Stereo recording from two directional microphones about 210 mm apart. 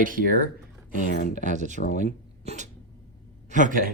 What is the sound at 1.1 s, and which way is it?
Speech, 45° left (ahead or behind).